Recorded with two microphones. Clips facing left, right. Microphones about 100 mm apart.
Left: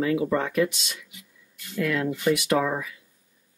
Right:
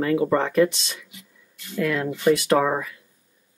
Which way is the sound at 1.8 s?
40° right (ahead or behind).